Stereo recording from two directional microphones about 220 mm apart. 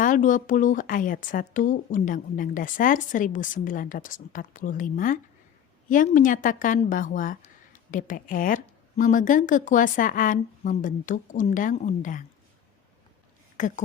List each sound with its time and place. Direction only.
0.0 s speech: 35° left (ahead or behind)
13.6 s speech: 35° left (ahead or behind)